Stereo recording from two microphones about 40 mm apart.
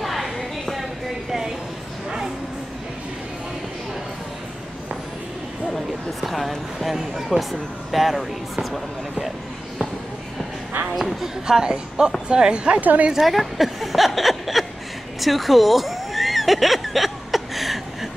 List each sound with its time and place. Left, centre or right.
0.0 s a sound: centre
2.0 s bow-wow: centre
6.2 s a woman's voice: centre
11.0 s a woman's voice: centre
11.4 s speech: centre
12.8 s a woman's voice: right
13.1 s a woman's voice: centre
15.1 s a sound: centre